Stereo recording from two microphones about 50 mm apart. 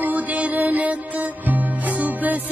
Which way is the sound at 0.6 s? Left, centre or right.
Right.